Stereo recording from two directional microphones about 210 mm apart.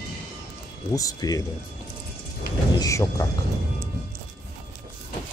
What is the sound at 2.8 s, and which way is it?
Speech, 15° left (ahead or behind).